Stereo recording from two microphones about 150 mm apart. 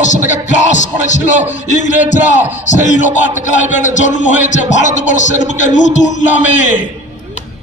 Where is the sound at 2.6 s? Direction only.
55° left (ahead or behind).